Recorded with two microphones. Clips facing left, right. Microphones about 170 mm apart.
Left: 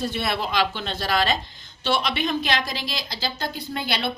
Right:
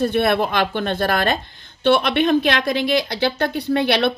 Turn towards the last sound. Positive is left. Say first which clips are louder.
# right 10 dB
turn(degrees=-70)  # may be behind; listen again after turning